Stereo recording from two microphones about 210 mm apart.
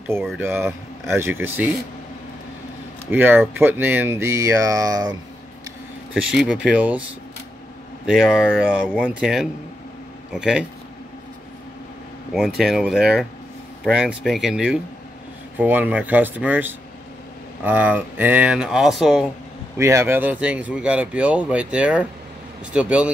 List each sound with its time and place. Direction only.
0.0 s speech: 10° right (ahead or behind)
3.1 s speech: 10° right (ahead or behind)
6.1 s speech: 5° right (ahead or behind)
8.1 s speech: centre (ahead or behind)
12.4 s speech: centre (ahead or behind)
19.8 s speech: 15° right (ahead or behind)